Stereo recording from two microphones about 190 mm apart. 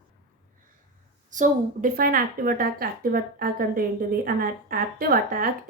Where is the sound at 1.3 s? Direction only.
45° right (ahead or behind).